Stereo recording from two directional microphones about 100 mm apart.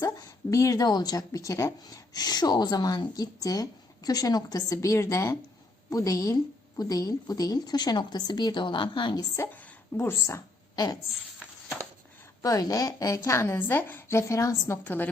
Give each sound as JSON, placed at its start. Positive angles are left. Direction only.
{"t": 0.0, "sound": "a woman's voice", "side_deg": 35}
{"t": 9.5, "sound": "a sound", "side_deg": 20}
{"t": 12.4, "sound": "a woman's voice", "side_deg": 35}
{"t": 14.8, "sound": "a woman's voice", "side_deg": 20}